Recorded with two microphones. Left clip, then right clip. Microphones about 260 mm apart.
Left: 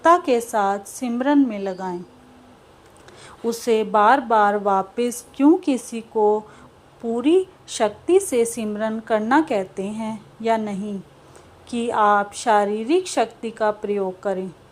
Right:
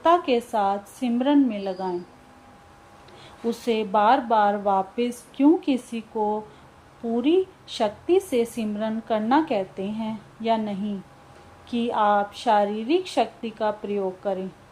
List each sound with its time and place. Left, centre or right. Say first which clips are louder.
0.0 s a woman's voice: left 4 dB; centre
3.5 s a woman's voice: left 4 dB; centre
7.2 s a woman's voice: left 3 dB; centre